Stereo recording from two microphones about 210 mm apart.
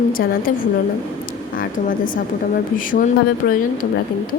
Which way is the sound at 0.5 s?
40° left (ahead or behind).